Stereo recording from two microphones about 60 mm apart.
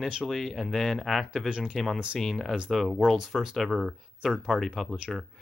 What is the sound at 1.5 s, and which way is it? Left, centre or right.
Speech, centre.